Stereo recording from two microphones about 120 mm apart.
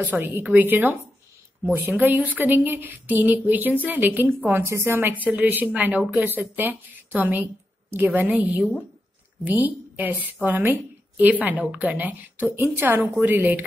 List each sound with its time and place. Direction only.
0.0 s a woman's voice: 15° right (ahead or behind)